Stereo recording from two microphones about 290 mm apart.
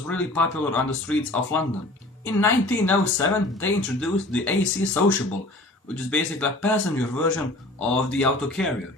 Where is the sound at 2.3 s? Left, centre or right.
Centre.